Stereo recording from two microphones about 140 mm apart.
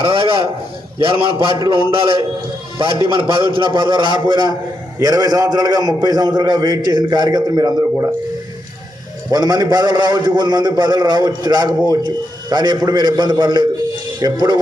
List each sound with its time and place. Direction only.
0.0 s a man's voice: 40° right (ahead or behind)
9.3 s a man's voice: 30° right (ahead or behind)